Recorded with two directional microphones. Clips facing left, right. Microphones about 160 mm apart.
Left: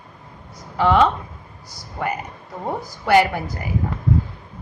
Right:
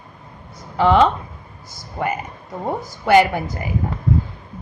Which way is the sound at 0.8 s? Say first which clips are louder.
Right 2 dB; 25° right (ahead or behind).